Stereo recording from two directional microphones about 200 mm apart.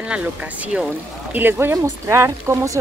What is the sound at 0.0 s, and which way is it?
Speech, 5° right (ahead or behind).